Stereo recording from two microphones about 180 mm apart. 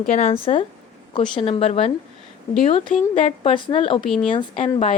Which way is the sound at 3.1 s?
30° left (ahead or behind).